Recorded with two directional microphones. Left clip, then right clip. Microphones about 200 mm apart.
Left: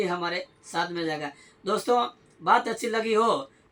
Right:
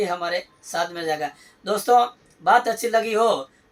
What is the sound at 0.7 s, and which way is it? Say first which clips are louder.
Speech: right 4 dB; 20° right (ahead or behind).